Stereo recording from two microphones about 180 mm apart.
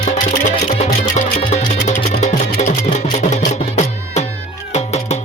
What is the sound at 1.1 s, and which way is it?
Music, 40° left (ahead or behind).